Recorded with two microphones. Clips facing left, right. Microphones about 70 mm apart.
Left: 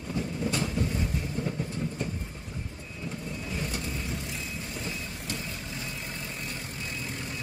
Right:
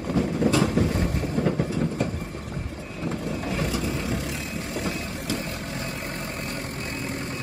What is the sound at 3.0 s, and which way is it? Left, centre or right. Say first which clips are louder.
Vehicle: right 8 dB; right.